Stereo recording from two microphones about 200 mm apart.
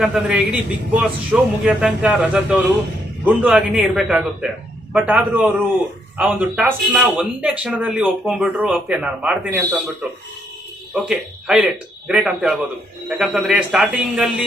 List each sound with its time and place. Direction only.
0.0 s a man's voice: 5° right (ahead or behind)